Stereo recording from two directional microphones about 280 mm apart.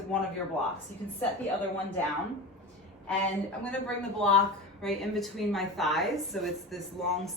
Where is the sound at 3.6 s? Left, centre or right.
Centre.